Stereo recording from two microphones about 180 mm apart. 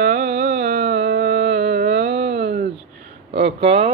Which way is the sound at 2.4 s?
50° right (ahead or behind).